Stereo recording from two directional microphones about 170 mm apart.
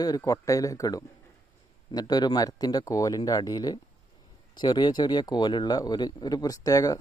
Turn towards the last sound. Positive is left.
turn(degrees=20)  # may be behind; listen again after turning